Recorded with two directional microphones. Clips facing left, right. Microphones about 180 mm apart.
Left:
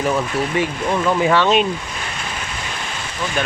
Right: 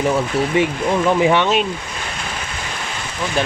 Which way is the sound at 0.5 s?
20° right (ahead or behind).